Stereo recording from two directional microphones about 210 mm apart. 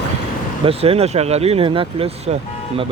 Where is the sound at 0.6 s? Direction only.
30° right (ahead or behind).